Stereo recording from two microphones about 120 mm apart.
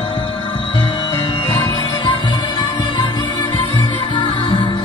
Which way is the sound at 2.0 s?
40° left (ahead or behind).